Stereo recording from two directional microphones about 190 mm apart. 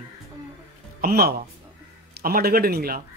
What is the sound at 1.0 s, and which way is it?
A man's voice, 50° right (ahead or behind).